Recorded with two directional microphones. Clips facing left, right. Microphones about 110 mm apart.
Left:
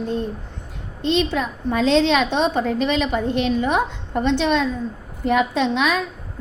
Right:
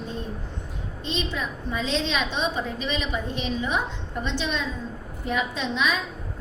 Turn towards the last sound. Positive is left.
turn(degrees=65)  # may be behind; listen again after turning